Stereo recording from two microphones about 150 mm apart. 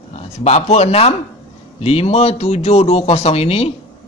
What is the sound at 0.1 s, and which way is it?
Speech, 45° left (ahead or behind).